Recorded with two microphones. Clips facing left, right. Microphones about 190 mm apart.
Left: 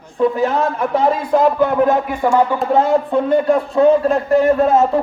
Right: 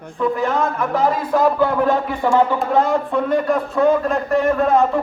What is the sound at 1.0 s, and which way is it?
Speech, 25° left (ahead or behind).